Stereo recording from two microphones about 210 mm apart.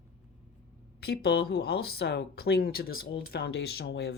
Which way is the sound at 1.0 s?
50° left (ahead or behind).